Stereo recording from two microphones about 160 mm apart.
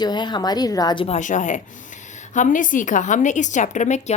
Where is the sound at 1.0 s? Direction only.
50° left (ahead or behind).